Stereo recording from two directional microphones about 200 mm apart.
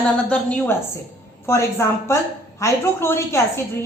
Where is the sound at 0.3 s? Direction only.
10° left (ahead or behind).